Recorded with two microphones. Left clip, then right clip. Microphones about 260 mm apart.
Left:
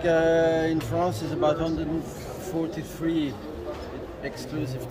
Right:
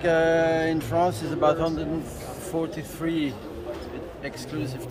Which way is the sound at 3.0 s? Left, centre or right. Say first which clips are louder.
Even; centre.